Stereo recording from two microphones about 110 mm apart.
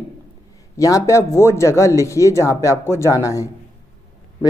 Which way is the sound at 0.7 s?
30° left (ahead or behind).